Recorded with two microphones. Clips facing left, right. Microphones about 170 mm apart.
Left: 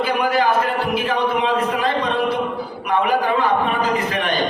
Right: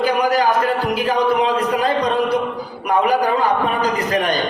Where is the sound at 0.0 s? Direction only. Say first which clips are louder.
Right 2 dB; 40° right (ahead or behind).